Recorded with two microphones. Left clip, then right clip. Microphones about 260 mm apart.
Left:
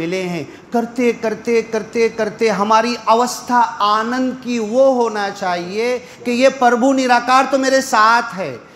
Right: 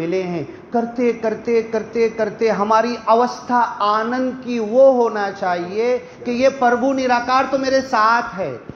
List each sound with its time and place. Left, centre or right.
0.0 s a man's voice: left